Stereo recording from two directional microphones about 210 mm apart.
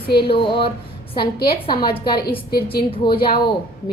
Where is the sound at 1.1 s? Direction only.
50° left (ahead or behind).